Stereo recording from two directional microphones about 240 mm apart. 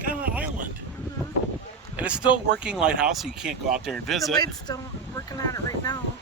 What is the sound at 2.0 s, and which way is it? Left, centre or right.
Speech, centre.